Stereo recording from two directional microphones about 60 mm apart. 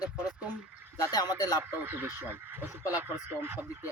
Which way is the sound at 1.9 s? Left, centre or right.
Right.